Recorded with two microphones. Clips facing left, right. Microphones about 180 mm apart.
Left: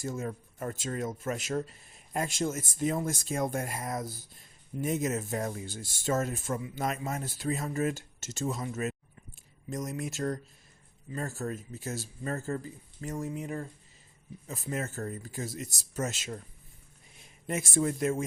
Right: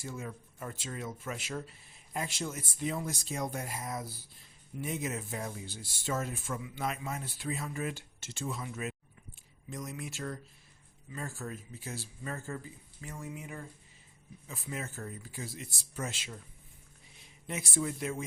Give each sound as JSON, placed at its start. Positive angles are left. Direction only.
{"t": 0.0, "sound": "speech", "side_deg": 45}
{"t": 17.4, "sound": "speech", "side_deg": 45}